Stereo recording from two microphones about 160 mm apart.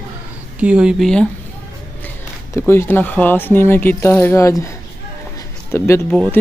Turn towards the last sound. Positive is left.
turn(degrees=5)  # may be behind; listen again after turning